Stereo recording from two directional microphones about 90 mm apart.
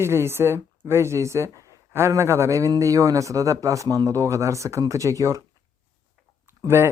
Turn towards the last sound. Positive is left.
turn(degrees=-30)  # may be behind; listen again after turning